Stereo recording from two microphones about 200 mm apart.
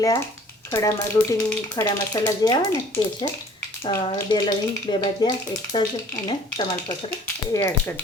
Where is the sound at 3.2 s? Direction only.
25° left (ahead or behind).